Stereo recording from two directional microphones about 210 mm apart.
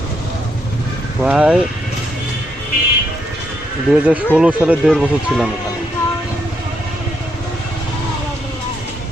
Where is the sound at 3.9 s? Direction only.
5° right (ahead or behind).